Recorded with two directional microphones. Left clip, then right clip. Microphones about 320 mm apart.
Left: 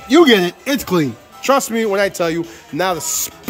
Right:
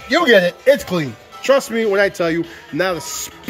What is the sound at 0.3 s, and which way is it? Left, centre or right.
Speech, centre.